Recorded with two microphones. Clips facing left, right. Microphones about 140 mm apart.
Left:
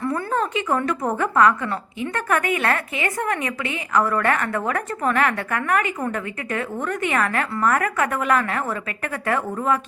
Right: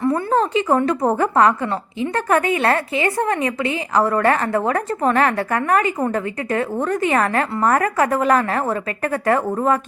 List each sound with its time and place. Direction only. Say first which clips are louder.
0.0 s a woman's voice: right 5 dB; 25° right (ahead or behind); by 9.8 s 40° right (ahead or behind)